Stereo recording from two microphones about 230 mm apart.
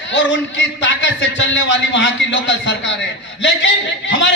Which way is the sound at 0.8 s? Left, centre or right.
Left.